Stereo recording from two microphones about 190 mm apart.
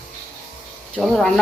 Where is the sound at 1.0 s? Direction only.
Centre (ahead or behind).